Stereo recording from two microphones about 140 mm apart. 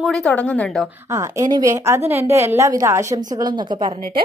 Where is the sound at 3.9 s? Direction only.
90° right.